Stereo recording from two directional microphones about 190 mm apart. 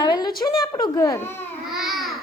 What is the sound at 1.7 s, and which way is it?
Babbling, centre (ahead or behind).